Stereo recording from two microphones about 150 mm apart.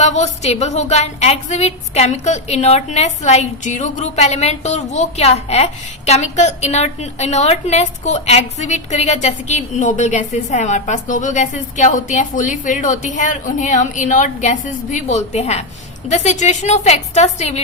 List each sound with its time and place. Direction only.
0.0 s a woman's voice: 50° left (ahead or behind)